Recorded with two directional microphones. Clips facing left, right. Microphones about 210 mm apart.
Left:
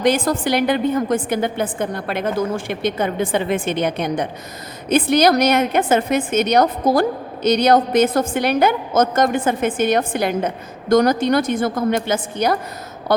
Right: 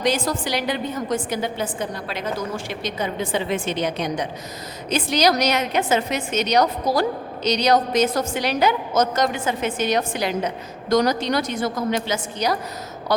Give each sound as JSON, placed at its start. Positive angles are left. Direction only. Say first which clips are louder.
{"t": 0.0, "sound": "a woman's voice", "louder": "left 5 dB", "side_deg": 55}